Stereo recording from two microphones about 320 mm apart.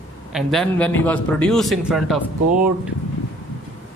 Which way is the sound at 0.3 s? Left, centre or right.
Centre.